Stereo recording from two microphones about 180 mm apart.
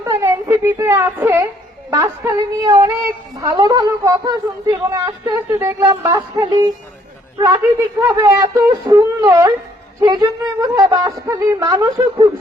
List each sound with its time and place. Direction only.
0.0 s a woman's voice: 15° right (ahead or behind)